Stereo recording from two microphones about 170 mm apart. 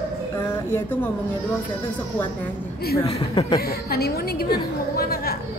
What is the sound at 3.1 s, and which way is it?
Speech, 30° left (ahead or behind).